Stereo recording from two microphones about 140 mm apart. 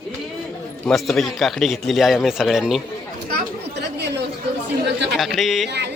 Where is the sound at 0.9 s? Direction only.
Centre (ahead or behind).